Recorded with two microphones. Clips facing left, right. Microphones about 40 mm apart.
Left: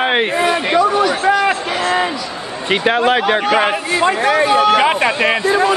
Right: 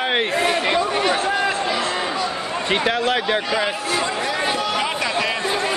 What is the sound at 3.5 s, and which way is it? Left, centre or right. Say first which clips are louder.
Speech: left 6 dB; left.